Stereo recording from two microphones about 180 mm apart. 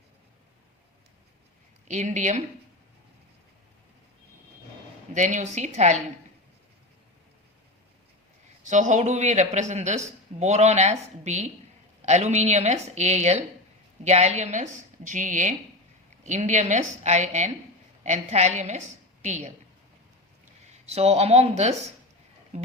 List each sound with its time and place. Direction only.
1.9 s a woman's voice: 40° right (ahead or behind)
5.1 s a woman's voice: 40° right (ahead or behind)
8.6 s a woman's voice: 45° right (ahead or behind)
20.8 s a woman's voice: 35° right (ahead or behind)